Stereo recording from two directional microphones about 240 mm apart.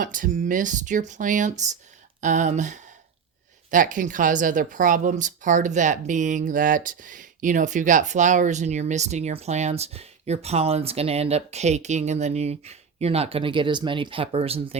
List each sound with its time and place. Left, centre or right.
0.0 s speech: right